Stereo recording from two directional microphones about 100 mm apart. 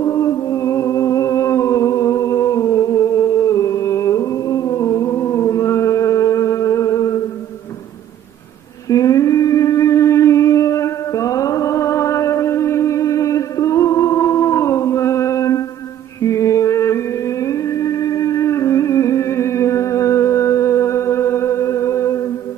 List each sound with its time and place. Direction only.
0.0 s music: 35° left (ahead or behind)
8.8 s humming: 35° left (ahead or behind)
16.2 s music: 30° left (ahead or behind)